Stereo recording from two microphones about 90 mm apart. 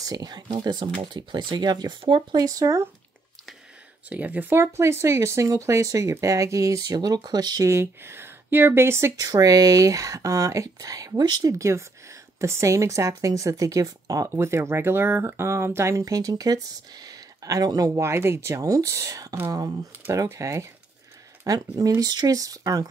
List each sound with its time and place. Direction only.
0.0 s speech: 45° right (ahead or behind); by 2.2 s 70° right (ahead or behind)
2.3 s speech: 40° right (ahead or behind)
4.1 s speech: 20° right (ahead or behind); by 7.6 s 50° right (ahead or behind)
7.6 s speech: 30° right (ahead or behind)
9.1 s speech: 40° right (ahead or behind)
11.2 s speech: 55° right (ahead or behind)
11.5 s speech: 35° right (ahead or behind)